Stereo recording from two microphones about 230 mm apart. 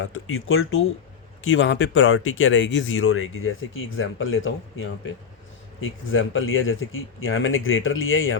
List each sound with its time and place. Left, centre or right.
0.0 s speech: left
6.1 s speech: left